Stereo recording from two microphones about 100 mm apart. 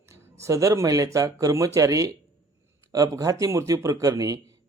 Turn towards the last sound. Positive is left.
turn(degrees=-35)  # may be behind; listen again after turning